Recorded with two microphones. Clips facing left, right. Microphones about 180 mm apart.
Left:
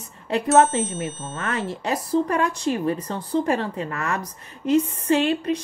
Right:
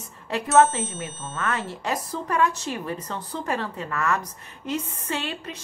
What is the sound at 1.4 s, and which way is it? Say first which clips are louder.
Speech: left 2 dB; 40° left (ahead or behind).